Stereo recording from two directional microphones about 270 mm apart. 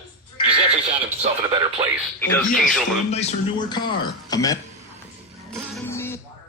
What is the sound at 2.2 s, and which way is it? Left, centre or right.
Speech, centre.